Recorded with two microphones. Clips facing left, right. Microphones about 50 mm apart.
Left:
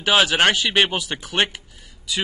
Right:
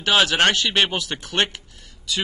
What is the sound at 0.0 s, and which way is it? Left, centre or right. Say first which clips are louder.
Speech: left 1 dB; centre.